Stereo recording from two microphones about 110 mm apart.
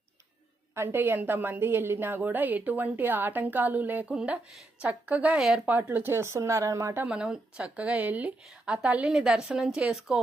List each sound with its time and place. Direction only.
0.8 s a woman's voice: 20° right (ahead or behind)
7.1 s a woman's voice: 10° right (ahead or behind)